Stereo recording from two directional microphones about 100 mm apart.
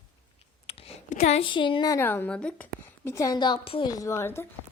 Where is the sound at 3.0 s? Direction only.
30° left (ahead or behind).